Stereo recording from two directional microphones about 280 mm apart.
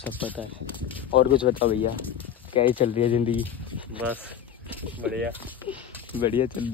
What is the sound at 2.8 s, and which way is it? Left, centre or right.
Speech, left.